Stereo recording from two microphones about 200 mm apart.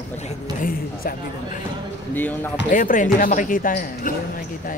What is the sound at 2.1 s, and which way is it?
Speech, 10° left (ahead or behind).